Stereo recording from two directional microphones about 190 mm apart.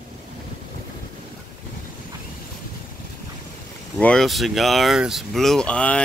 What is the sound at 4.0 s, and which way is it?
Speech, 5° left (ahead or behind).